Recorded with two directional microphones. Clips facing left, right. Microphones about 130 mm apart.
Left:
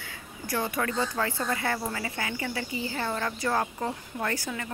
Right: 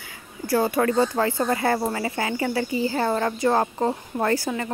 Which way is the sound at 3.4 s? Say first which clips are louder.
Right 7 dB; 30° right (ahead or behind).